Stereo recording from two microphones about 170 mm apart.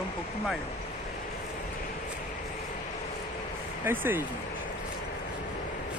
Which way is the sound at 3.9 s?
15° right (ahead or behind).